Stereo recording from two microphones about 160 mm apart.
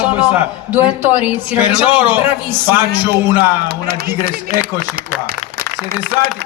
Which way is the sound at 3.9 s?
70° right (ahead or behind).